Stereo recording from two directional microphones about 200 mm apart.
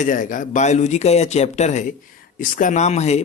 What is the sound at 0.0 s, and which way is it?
Speech, 40° left (ahead or behind).